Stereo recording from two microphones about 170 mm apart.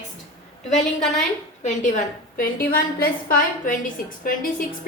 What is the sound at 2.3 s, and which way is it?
A woman's voice, 60° left (ahead or behind).